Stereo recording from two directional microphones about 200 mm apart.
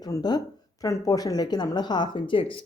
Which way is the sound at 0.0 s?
20° left (ahead or behind).